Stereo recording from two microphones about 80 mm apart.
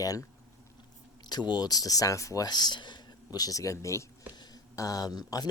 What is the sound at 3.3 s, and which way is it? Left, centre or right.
Speech, left.